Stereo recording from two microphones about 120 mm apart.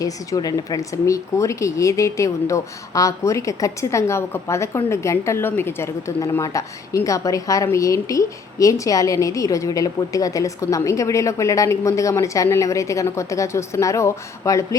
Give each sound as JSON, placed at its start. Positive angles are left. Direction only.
{"t": 0.0, "sound": "speech", "side_deg": 30}